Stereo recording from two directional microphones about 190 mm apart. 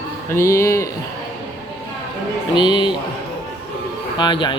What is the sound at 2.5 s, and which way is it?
Speech, 25° left (ahead or behind).